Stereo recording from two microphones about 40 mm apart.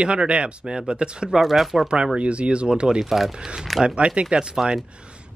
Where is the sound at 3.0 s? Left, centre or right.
Centre.